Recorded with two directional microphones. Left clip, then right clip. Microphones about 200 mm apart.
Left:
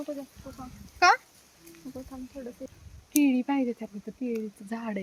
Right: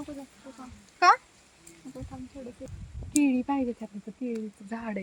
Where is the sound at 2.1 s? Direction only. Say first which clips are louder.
Left 1 dB; 50° left (ahead or behind).